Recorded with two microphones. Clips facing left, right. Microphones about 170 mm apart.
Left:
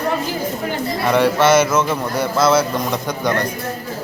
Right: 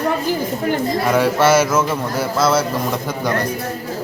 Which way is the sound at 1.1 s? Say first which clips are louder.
Left 1 dB; 5° right (ahead or behind).